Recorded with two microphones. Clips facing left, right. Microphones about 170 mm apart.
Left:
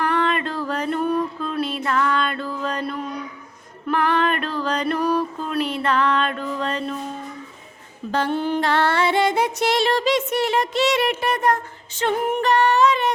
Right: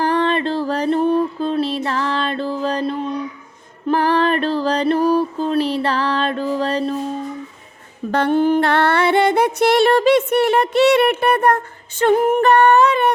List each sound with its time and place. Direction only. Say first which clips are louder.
0.0 s music: right 4 dB; 30° right (ahead or behind)
8.1 s female singing: right 6 dB; 55° right (ahead or behind)